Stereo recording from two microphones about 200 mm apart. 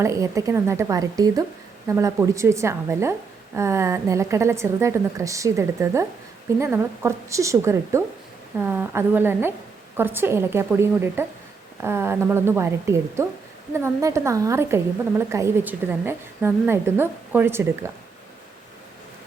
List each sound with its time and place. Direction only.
0.0 s a woman's voice: 15° right (ahead or behind)